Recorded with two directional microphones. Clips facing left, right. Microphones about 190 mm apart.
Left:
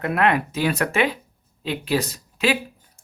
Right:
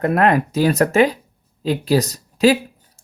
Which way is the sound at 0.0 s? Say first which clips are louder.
Right 5 dB; 40° right (ahead or behind).